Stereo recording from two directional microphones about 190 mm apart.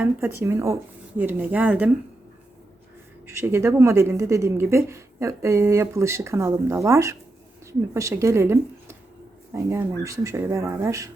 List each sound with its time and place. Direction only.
0.0 s a woman's voice: 10° right (ahead or behind)
3.2 s a woman's voice: 15° right (ahead or behind)